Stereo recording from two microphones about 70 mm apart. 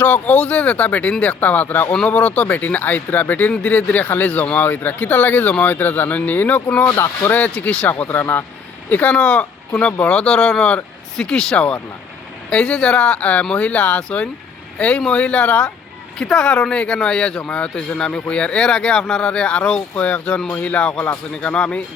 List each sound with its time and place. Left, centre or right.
0.0 s speech: left
6.9 s speech: left
7.3 s speech: left
11.5 s speech: centre
16.1 s speech: centre